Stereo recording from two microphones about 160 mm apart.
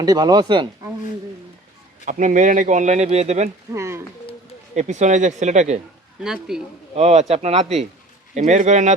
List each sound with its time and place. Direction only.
0.0 s speech: 25° right (ahead or behind)
2.0 s speech: 55° right (ahead or behind)
3.7 s speech: 15° right (ahead or behind)
4.7 s speech: 45° right (ahead or behind)
6.2 s speech: 5° right (ahead or behind)
6.9 s speech: 45° right (ahead or behind)